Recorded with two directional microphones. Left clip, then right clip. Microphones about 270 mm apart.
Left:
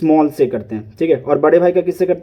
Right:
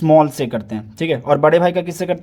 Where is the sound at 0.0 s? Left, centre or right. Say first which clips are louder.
Even; centre.